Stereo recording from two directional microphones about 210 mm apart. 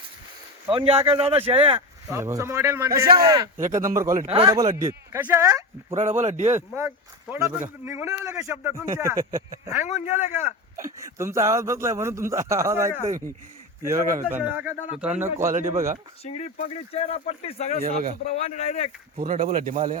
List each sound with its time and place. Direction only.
0.7 s speech: 25° right (ahead or behind)
2.0 s a man's voice: 15° right (ahead or behind)
4.3 s speech: 25° right (ahead or behind)
4.5 s a man's voice: 15° right (ahead or behind)
6.0 s speech: 35° right (ahead or behind)
6.5 s a man's voice: 10° right (ahead or behind)
10.8 s a man's voice: 15° right (ahead or behind)
14.3 s a man's voice: 10° right (ahead or behind)
16.2 s speech: 30° left (ahead or behind)
17.8 s speech: 35° right (ahead or behind)
18.3 s speech: 30° left (ahead or behind)
19.1 s speech: 30° right (ahead or behind)
19.4 s speech: 40° right (ahead or behind)